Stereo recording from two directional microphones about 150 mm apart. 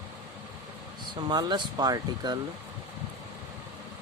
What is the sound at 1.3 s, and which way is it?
Speech, 25° right (ahead or behind).